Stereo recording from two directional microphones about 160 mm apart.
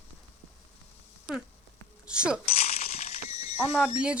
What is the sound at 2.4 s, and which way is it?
Coin, 40° left (ahead or behind).